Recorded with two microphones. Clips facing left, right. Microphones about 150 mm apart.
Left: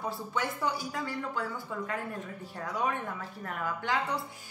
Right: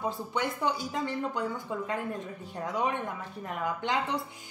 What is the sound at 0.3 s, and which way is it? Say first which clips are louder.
A woman's voice: right 1 dB; 20° right (ahead or behind).